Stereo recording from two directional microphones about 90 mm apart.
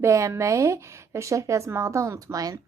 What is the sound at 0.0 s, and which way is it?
Speech, 35° right (ahead or behind).